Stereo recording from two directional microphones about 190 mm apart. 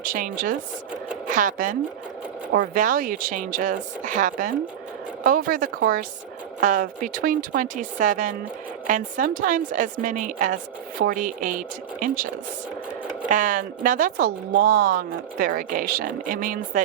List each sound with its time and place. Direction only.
0.0 s speech: 45° right (ahead or behind)
2.7 s speech: 45° right (ahead or behind)